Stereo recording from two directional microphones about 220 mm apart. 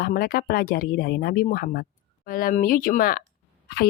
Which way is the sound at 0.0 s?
45° left (ahead or behind).